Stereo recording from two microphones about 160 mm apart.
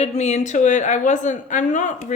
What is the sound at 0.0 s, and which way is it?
A woman's voice, 45° left (ahead or behind).